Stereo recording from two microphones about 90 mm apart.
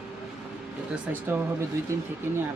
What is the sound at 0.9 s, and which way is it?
Speech, 15° right (ahead or behind).